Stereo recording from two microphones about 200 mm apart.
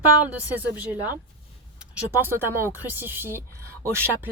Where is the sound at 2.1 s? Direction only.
10° right (ahead or behind).